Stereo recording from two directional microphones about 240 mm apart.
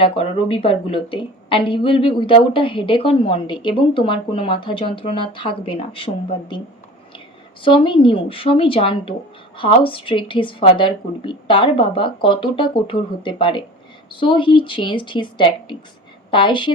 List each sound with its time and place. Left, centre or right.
0.0 s a woman's voice: left
7.6 s a woman's voice: left